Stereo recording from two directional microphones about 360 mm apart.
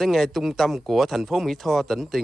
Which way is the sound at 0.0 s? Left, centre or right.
Centre.